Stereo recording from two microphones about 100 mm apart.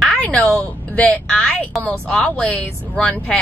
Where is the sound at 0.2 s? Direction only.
10° left (ahead or behind).